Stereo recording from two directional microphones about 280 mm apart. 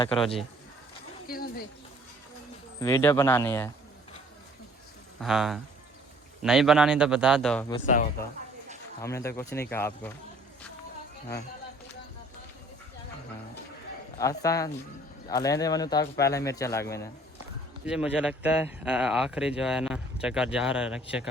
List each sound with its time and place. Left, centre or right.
1.3 s a sound: left
2.8 s speech: centre
5.2 s a man's voice: centre
9.0 s speech: centre
14.2 s speech: centre
17.8 s a man's voice: centre